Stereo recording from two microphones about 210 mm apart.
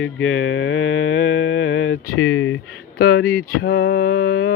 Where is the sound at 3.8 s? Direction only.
75° left (ahead or behind).